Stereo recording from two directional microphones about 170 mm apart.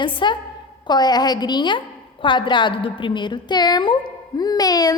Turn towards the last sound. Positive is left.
turn(degrees=20)  # may be behind; listen again after turning